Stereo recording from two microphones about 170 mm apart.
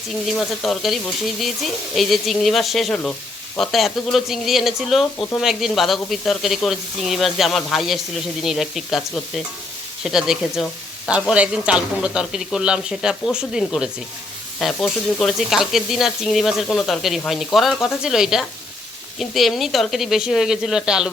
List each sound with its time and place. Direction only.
0.3 s speech: centre (ahead or behind)